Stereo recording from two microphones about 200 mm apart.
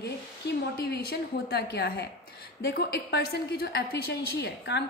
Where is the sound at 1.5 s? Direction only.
55° left (ahead or behind).